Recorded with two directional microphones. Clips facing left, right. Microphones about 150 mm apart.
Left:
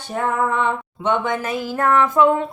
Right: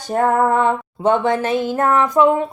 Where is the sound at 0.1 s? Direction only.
45° right (ahead or behind).